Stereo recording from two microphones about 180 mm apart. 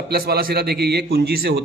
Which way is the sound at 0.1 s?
60° right (ahead or behind).